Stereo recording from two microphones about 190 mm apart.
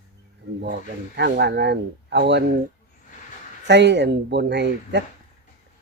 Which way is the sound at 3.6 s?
65° right (ahead or behind).